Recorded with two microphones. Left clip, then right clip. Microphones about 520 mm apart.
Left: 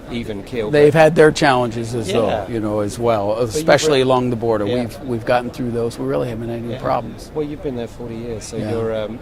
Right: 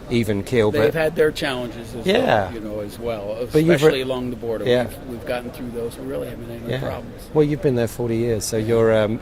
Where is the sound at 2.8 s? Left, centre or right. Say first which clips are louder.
Left 10 dB; left.